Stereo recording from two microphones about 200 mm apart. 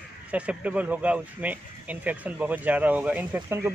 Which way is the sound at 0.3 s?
5° right (ahead or behind).